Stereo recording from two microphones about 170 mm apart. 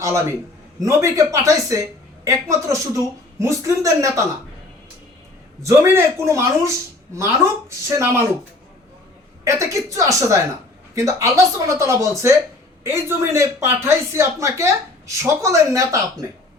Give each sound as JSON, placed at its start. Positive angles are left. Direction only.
{"t": 0.0, "sound": "a woman's voice", "side_deg": -15}
{"t": 5.6, "sound": "a woman's voice", "side_deg": -15}
{"t": 7.9, "sound": "a woman's voice", "side_deg": -15}
{"t": 9.4, "sound": "a woman's voice", "side_deg": -15}